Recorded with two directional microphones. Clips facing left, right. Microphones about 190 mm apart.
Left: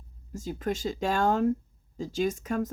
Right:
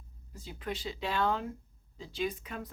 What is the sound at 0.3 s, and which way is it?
Speech, 45° left (ahead or behind).